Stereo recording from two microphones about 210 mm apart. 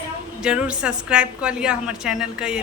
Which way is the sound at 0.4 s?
5° right (ahead or behind).